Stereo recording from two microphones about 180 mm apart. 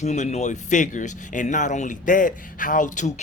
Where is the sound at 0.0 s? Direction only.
40° left (ahead or behind).